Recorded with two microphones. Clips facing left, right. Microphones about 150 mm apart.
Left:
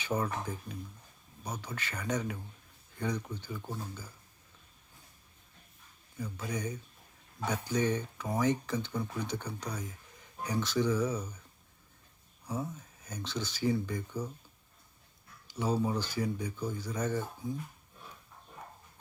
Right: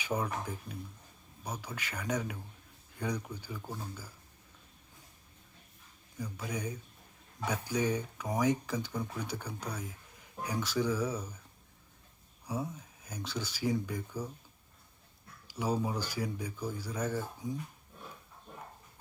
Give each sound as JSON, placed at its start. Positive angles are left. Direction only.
{"t": 0.0, "sound": "speech", "side_deg": -10}
{"t": 6.1, "sound": "speech", "side_deg": -10}
{"t": 12.5, "sound": "speech", "side_deg": -10}
{"t": 15.4, "sound": "speech", "side_deg": -10}